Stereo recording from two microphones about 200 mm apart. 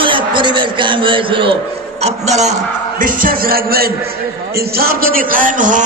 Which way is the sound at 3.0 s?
45° right (ahead or behind).